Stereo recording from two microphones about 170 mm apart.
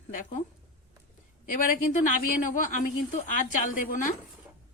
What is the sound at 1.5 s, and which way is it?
Speech, 50° left (ahead or behind).